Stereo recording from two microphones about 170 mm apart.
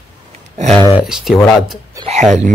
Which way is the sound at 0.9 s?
5° right (ahead or behind).